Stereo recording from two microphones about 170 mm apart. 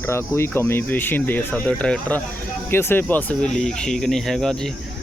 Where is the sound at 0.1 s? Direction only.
15° left (ahead or behind).